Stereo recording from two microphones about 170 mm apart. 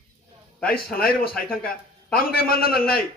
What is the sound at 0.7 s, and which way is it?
A man's voice, 60° left (ahead or behind).